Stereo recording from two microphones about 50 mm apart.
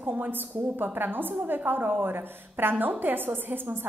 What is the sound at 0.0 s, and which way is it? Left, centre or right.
A woman's voice, right.